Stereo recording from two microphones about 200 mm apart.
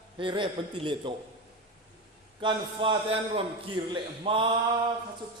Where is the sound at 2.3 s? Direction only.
25° right (ahead or behind).